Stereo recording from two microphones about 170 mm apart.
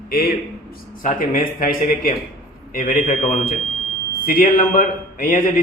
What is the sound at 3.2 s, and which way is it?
Speech, 35° left (ahead or behind).